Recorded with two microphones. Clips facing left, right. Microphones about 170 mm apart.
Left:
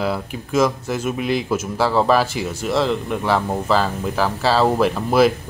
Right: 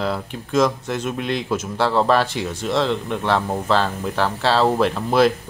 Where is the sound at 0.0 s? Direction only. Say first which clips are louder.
Left 1 dB; 5° left (ahead or behind).